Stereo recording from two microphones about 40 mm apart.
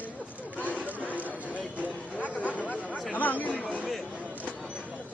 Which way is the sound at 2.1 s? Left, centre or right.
Left.